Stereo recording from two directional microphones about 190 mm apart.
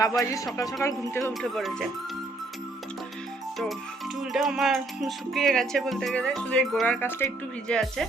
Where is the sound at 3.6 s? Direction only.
Centre (ahead or behind).